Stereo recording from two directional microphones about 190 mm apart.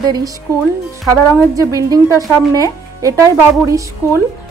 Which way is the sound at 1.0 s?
15° right (ahead or behind).